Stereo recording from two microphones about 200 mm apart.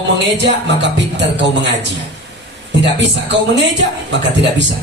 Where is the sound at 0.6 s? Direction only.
65° right (ahead or behind).